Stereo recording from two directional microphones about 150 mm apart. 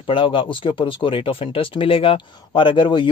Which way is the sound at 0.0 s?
35° left (ahead or behind).